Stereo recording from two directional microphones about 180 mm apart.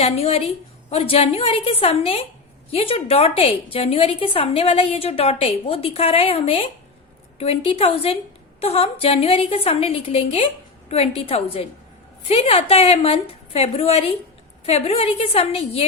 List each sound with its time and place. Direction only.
0.0 s a woman's voice: 35° left (ahead or behind)